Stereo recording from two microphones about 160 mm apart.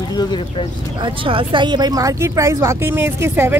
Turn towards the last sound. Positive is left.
turn(degrees=-15)  # may be behind; listen again after turning